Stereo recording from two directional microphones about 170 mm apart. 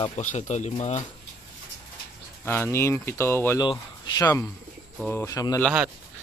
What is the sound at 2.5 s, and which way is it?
Speech, 15° left (ahead or behind).